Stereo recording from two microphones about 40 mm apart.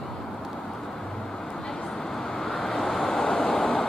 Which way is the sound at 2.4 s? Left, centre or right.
Centre.